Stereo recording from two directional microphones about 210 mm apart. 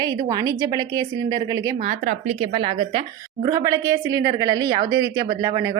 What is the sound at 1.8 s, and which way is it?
A woman's voice, 35° right (ahead or behind).